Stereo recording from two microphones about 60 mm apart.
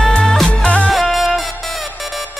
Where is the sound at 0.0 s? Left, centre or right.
Centre.